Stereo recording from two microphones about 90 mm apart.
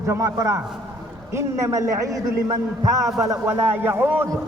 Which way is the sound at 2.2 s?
55° right (ahead or behind).